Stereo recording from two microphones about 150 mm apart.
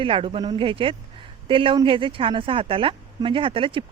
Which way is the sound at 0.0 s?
35° right (ahead or behind).